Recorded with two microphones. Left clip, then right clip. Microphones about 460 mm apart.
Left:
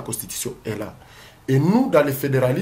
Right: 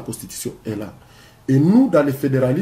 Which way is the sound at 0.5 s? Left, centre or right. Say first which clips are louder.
Right 2 dB; left.